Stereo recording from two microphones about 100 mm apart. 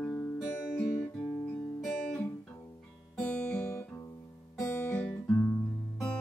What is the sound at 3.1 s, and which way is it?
Guitar, 15° left (ahead or behind).